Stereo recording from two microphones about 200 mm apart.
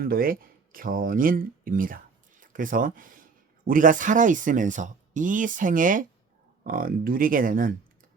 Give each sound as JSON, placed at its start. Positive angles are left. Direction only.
{"t": 0.0, "sound": "speech", "side_deg": -45}